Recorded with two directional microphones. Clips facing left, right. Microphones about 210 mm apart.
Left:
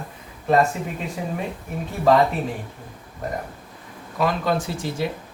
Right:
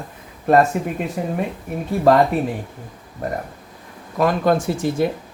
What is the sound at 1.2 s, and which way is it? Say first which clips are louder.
Speech: right 4 dB; 50° right (ahead or behind).